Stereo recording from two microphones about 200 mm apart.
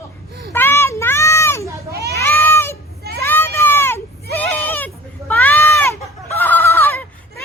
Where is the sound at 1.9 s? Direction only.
55° right (ahead or behind).